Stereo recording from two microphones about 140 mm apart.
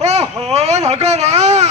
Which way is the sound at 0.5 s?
50° right (ahead or behind).